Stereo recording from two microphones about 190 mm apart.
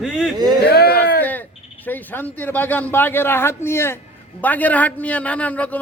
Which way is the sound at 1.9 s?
10° left (ahead or behind).